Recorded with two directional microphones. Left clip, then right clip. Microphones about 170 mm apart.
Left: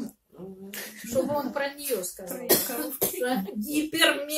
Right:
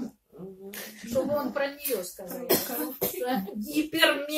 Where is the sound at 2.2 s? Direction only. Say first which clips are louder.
Left 2 dB; 40° left (ahead or behind).